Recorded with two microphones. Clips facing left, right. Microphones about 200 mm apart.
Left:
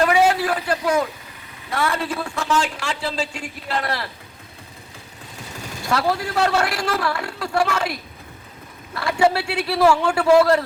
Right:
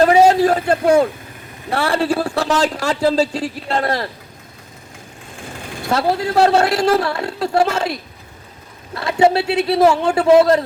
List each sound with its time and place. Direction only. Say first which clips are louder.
0.0 s a man's voice: right 6 dB; 35° right (ahead or behind)
1.7 s speech: right 6 dB; 30° right (ahead or behind)
5.9 s a woman's voice: right 4 dB; 25° right (ahead or behind)
9.0 s a woman's voice: right 4 dB; 20° right (ahead or behind)